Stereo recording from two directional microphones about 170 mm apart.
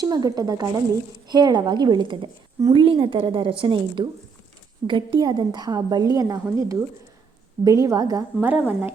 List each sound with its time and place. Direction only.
0.0 s a woman's voice: 20° right (ahead or behind)